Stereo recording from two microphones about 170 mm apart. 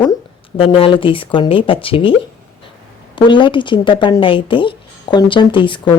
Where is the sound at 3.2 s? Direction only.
30° left (ahead or behind).